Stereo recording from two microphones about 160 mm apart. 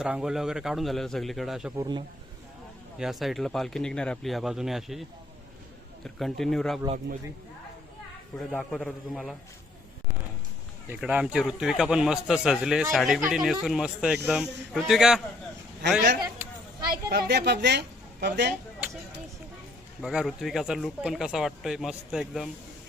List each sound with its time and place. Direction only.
0.0 s a man's voice: 5° right (ahead or behind)
1.8 s a man's voice: 30° right (ahead or behind)
3.0 s a man's voice: centre (ahead or behind)
6.1 s a man's voice: centre (ahead or behind)
8.4 s a man's voice: centre (ahead or behind)
10.8 s a man's voice: 5° right (ahead or behind)
17.1 s a woman's voice: 85° right
20.0 s a man's voice: 5° right (ahead or behind)